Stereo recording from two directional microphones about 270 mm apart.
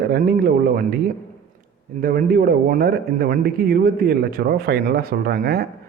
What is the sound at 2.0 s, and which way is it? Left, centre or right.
A man's voice, right.